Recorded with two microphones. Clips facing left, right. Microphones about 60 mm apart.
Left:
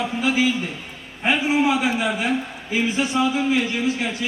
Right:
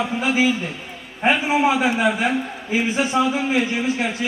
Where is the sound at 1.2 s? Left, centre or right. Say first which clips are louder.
Right 2 dB; right.